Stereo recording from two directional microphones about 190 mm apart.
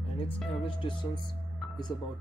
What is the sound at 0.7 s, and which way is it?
Speech, 25° left (ahead or behind).